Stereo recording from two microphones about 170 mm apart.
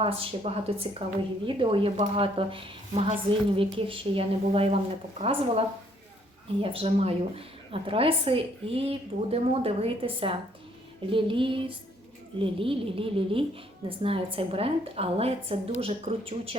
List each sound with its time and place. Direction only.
0.0 s a woman's voice: 35° right (ahead or behind)